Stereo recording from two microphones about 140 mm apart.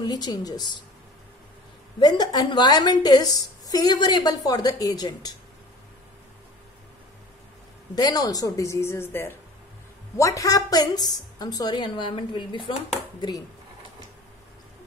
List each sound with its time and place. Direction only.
0.0 s a woman's voice: 30° left (ahead or behind)
2.0 s a woman's voice: 30° left (ahead or behind)
7.9 s a woman's voice: 25° left (ahead or behind)